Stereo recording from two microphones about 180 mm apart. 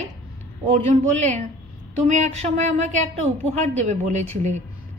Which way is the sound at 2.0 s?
40° right (ahead or behind).